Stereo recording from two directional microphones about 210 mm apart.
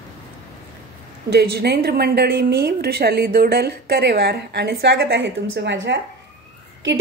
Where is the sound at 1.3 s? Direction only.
50° right (ahead or behind).